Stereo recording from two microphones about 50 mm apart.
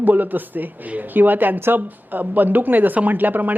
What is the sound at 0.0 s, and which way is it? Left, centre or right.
Speech, right.